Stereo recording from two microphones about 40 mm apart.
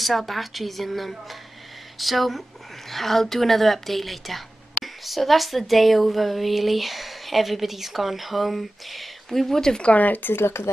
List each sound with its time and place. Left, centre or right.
0.0 s a woman's voice: centre
9.8 s speech: left
10.2 s speech: left